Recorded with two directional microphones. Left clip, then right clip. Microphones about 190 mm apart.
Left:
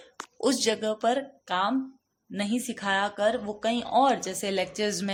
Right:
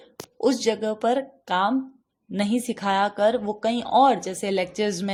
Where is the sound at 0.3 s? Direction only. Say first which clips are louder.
Right 3 dB; 15° right (ahead or behind).